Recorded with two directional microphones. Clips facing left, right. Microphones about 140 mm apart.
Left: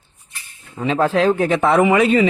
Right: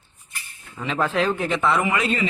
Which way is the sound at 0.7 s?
35° left (ahead or behind).